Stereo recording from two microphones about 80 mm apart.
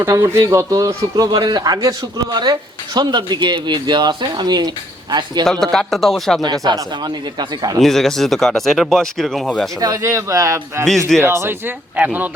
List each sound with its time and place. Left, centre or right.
0.4 s a man's voice: right
5.5 s speech: centre
6.4 s a man's voice: right
7.8 s speech: centre
9.8 s speech: right